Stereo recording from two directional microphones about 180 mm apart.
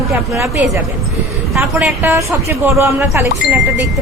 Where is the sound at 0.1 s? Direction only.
15° right (ahead or behind).